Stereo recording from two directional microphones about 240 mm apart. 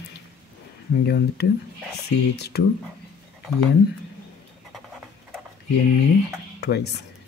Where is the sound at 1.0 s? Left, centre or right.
Left.